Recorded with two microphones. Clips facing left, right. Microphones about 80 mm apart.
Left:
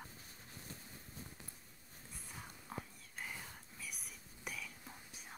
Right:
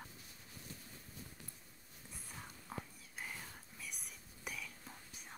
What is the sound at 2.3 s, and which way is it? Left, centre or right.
Whispering, centre.